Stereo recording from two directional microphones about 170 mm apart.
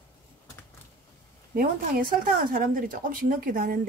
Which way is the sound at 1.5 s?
55° right (ahead or behind).